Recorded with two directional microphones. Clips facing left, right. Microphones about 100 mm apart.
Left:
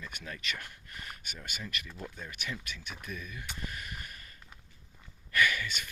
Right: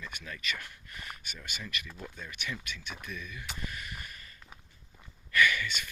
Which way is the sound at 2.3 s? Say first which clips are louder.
Right 1 dB; 40° left (ahead or behind).